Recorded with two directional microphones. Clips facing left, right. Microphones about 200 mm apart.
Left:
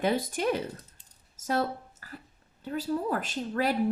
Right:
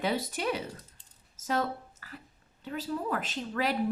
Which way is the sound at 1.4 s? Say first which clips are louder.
Left 2 dB; 45° left (ahead or behind).